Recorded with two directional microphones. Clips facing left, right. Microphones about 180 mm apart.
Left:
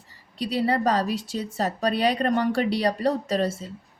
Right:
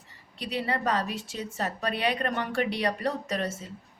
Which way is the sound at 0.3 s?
35° left (ahead or behind).